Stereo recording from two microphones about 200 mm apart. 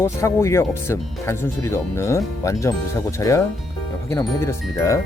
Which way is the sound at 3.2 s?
15° left (ahead or behind).